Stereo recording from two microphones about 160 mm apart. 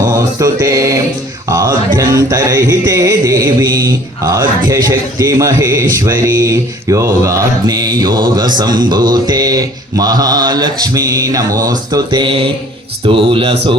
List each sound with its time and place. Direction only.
0.0 s mantra: 20° right (ahead or behind)
1.5 s music: 25° right (ahead or behind)
13.1 s speech: 35° right (ahead or behind)